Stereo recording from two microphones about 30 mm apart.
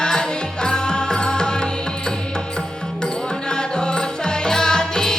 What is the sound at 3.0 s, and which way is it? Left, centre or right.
Music, left.